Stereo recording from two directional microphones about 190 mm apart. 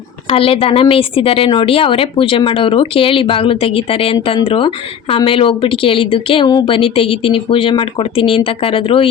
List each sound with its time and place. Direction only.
0.3 s a woman's voice: 30° left (ahead or behind)